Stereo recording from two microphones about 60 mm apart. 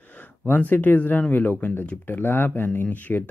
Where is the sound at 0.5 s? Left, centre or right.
Left.